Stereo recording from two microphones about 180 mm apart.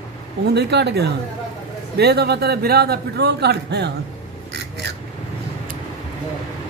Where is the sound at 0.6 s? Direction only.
70° right (ahead or behind).